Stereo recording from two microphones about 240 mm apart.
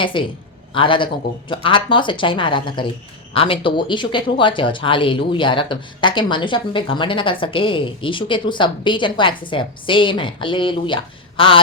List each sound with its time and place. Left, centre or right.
0.0 s speech: left